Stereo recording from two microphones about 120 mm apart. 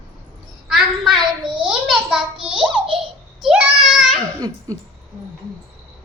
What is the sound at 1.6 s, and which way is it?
A child's voice, 5° right (ahead or behind).